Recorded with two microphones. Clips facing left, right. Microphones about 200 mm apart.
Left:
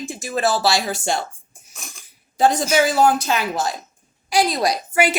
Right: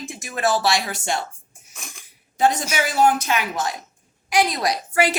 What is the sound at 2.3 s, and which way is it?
A woman's voice, 35° left (ahead or behind).